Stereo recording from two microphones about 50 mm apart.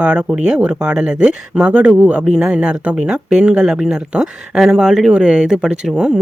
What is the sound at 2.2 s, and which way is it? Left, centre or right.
Speech, centre.